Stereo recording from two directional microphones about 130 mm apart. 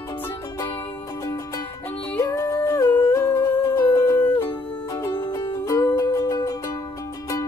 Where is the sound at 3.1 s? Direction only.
20° left (ahead or behind).